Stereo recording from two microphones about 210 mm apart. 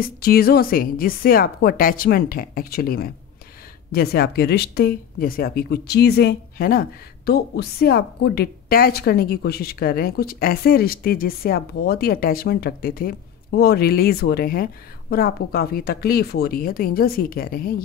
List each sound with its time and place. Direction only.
0.0 s speech: 45° left (ahead or behind)